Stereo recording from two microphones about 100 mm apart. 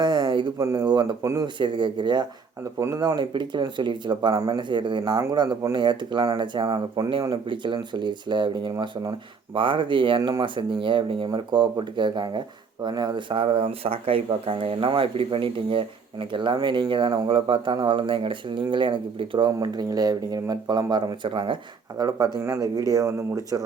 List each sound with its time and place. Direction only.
0.0 s a sound: 50° right (ahead or behind)
0.6 s speech: 30° right (ahead or behind)
1.4 s speech: 50° right (ahead or behind)
2.7 s speech: 35° right (ahead or behind); by 19.5 s 55° right (ahead or behind)
19.5 s speech: 40° right (ahead or behind)
22.4 s speech: 30° right (ahead or behind)